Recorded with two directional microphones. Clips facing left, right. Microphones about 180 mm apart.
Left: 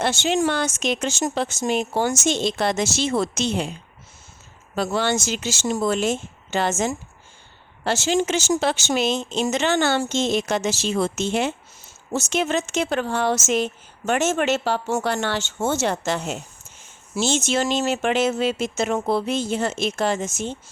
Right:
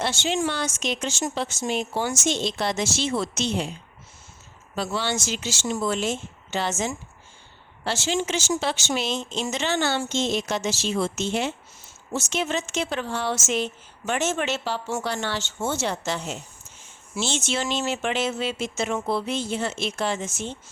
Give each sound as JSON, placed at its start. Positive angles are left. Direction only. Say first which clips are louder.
{"t": 0.0, "sound": "speech", "louder": "left 4 dB", "side_deg": 50}
{"t": 4.7, "sound": "speech", "louder": "left 5 dB", "side_deg": 50}
{"t": 17.2, "sound": "speech", "louder": "left 5 dB", "side_deg": 45}